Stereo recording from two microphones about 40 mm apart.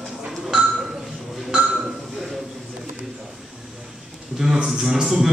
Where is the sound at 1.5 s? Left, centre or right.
Right.